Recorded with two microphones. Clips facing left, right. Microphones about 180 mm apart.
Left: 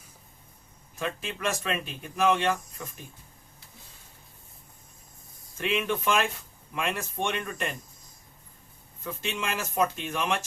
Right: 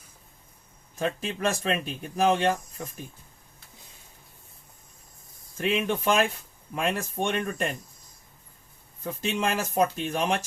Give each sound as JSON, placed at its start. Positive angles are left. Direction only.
{"t": 0.9, "sound": "speech", "side_deg": -40}
{"t": 5.5, "sound": "speech", "side_deg": -40}
{"t": 9.0, "sound": "speech", "side_deg": -40}